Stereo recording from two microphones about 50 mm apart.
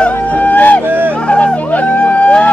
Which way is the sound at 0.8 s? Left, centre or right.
Right.